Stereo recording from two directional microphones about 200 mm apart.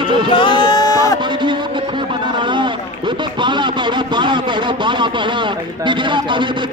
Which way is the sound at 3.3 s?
25° right (ahead or behind).